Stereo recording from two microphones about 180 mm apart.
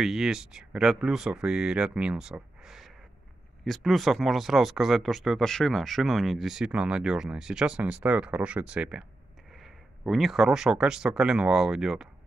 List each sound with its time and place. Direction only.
0.0 s speech: centre (ahead or behind)